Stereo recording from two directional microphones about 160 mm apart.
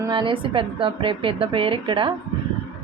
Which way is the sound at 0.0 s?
30° right (ahead or behind).